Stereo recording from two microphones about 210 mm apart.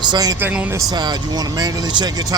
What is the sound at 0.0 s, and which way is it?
Speech, 20° right (ahead or behind).